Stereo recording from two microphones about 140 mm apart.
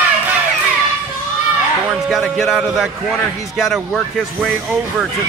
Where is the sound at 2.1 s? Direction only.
Centre (ahead or behind).